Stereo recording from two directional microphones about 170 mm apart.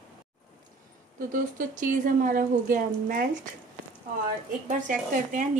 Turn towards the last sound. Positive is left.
turn(degrees=-50)  # may be behind; listen again after turning